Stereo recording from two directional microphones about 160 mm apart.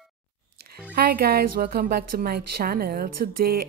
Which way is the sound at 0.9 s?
70° right (ahead or behind).